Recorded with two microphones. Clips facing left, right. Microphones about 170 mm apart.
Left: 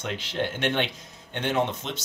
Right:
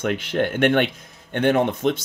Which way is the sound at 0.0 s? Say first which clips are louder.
Right 7 dB; 55° right (ahead or behind).